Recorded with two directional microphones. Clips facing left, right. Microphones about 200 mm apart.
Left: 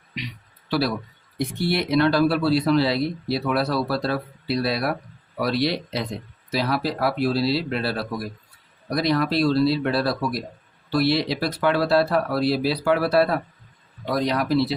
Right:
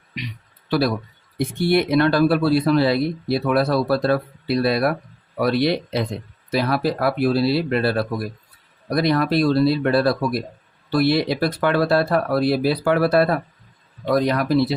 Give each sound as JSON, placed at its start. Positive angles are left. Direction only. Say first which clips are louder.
{"t": 0.7, "sound": "speech", "louder": "right 3 dB", "side_deg": -50}